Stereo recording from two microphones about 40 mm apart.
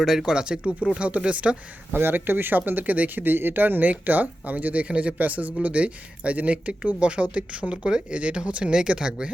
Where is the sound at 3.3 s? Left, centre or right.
Right.